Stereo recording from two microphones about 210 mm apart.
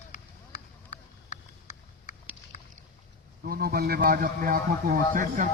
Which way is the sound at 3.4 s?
45° right (ahead or behind).